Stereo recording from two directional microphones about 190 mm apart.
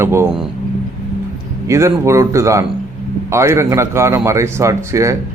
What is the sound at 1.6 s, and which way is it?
A man's voice, 15° right (ahead or behind).